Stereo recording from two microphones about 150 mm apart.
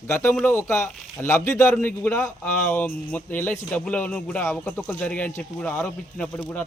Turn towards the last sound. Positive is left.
turn(degrees=10)  # may be behind; listen again after turning